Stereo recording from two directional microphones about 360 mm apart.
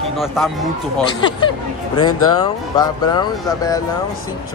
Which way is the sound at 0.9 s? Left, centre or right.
Centre.